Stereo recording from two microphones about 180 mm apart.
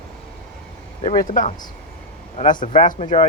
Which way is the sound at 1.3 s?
45° left (ahead or behind).